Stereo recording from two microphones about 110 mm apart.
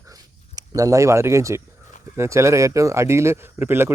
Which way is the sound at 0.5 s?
35° right (ahead or behind).